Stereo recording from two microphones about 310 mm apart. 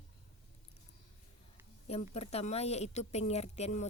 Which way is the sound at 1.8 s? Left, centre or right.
Centre.